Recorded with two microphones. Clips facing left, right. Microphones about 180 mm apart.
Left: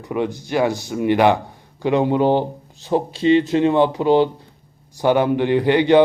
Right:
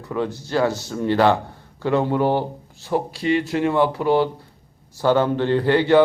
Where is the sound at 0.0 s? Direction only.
15° left (ahead or behind).